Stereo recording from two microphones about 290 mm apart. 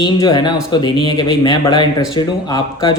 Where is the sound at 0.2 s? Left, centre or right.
Centre.